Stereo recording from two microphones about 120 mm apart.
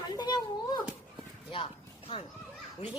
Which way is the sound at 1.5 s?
45° left (ahead or behind).